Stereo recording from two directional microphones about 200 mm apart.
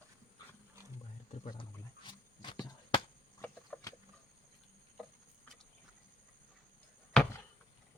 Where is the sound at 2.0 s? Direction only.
20° left (ahead or behind).